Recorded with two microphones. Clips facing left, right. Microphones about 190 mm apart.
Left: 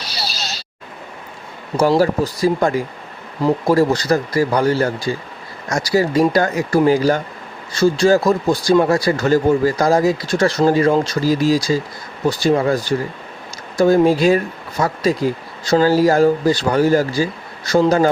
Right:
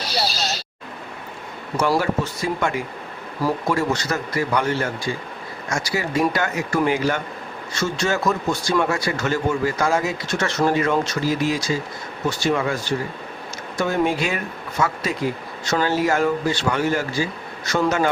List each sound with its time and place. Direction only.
1.7 s speech: 35° left (ahead or behind)